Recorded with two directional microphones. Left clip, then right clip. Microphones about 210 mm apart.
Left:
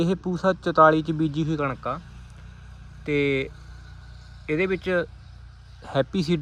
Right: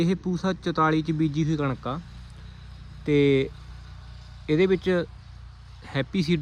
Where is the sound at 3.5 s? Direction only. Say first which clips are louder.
Even; 30° right (ahead or behind).